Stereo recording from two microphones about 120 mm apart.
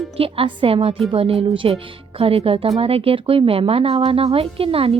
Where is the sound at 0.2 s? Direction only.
50° right (ahead or behind).